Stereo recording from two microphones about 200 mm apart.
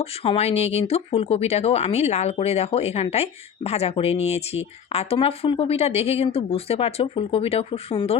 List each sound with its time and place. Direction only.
0.0 s speech: 30° left (ahead or behind)